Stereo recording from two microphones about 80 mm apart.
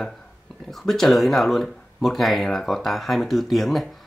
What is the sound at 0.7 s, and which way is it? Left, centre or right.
Speech, centre.